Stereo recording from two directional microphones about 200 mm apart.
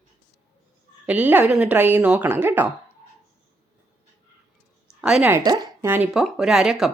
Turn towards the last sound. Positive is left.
turn(degrees=0)  # may be behind; listen again after turning